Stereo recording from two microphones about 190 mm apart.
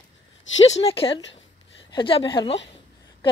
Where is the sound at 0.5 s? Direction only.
80° left.